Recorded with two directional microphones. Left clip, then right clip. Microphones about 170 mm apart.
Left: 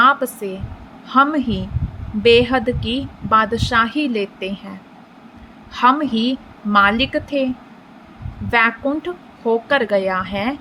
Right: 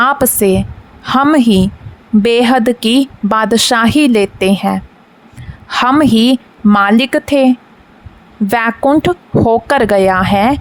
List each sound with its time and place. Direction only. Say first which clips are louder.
0.0 s a woman's voice: right 4 dB; 75° right (ahead or behind)